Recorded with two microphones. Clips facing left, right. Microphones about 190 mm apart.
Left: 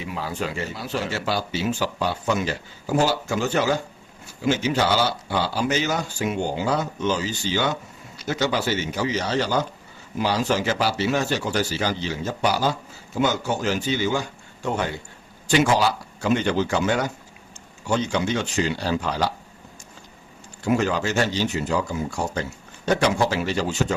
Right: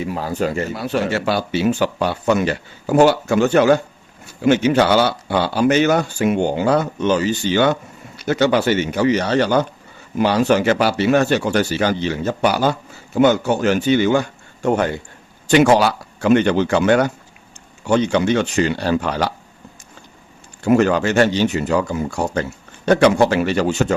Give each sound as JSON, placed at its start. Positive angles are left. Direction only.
{"t": 0.0, "sound": "speech", "side_deg": -45}
{"t": 20.7, "sound": "speech", "side_deg": -60}